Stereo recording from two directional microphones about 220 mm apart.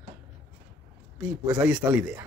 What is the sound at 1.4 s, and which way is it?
Speech, 5° right (ahead or behind).